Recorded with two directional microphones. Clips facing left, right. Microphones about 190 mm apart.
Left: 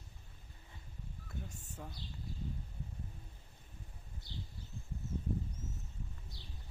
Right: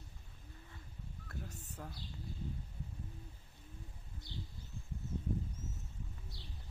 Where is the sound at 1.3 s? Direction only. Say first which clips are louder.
Even; centre (ahead or behind).